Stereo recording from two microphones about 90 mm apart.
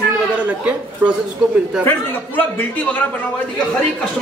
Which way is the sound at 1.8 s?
20° left (ahead or behind).